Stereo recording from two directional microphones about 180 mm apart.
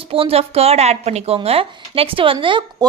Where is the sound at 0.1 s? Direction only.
30° right (ahead or behind).